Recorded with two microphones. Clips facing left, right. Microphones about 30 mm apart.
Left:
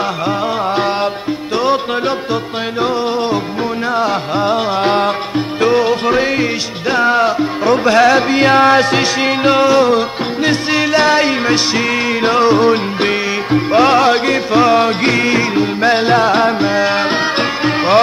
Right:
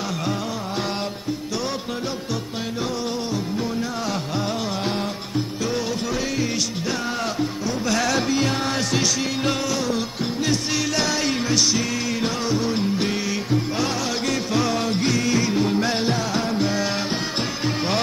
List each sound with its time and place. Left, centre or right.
4.0 s music: left
7.6 s music: left
7.9 s music: left
8.4 s music: left
16.6 s music: left